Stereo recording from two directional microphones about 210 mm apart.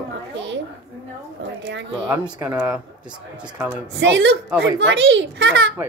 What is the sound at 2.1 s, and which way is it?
Speech, 10° right (ahead or behind).